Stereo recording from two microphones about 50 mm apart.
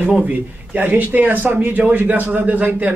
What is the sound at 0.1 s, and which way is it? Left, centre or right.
Speech, right.